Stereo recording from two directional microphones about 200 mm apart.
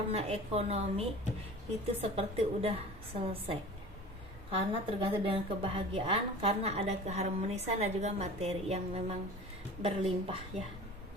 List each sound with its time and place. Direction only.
0.1 s a woman's voice: 30° right (ahead or behind)